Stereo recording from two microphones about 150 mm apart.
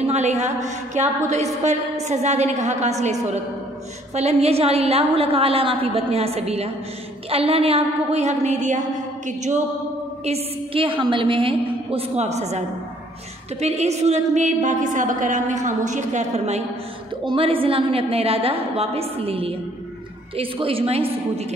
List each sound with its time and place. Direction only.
0.0 s a woman's voice: 45° right (ahead or behind)
10.2 s a woman's voice: 40° right (ahead or behind)
17.2 s a woman's voice: 35° right (ahead or behind)